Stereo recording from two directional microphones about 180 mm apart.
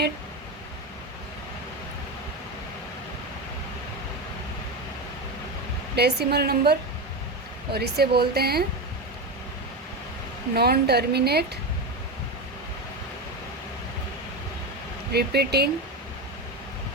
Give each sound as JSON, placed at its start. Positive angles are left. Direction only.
{"t": 6.0, "sound": "a woman's voice", "side_deg": -65}
{"t": 10.5, "sound": "a woman's voice", "side_deg": -60}
{"t": 15.1, "sound": "a woman's voice", "side_deg": -65}